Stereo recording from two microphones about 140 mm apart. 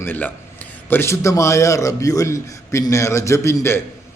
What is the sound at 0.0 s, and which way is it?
A man's voice, 15° left (ahead or behind).